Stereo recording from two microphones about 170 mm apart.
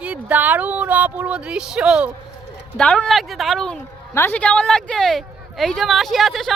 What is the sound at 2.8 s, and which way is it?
Speech, 5° left (ahead or behind).